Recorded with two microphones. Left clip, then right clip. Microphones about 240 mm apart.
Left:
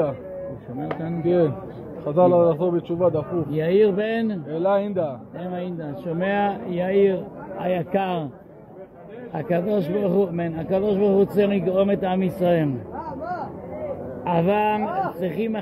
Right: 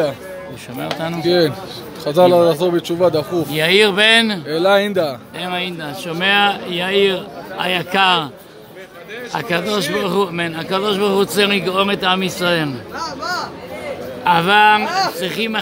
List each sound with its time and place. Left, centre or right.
1.2 s a man's voice: right
9.4 s a man's voice: centre
14.2 s speech: right
14.8 s a man's voice: centre